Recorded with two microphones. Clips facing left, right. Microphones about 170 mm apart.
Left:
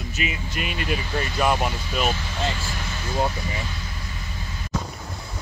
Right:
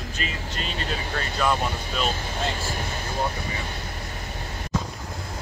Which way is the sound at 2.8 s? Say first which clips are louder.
Right 2 dB; 50° right (ahead or behind).